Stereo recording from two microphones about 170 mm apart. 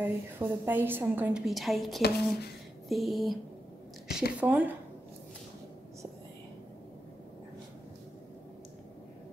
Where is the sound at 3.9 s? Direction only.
Centre (ahead or behind).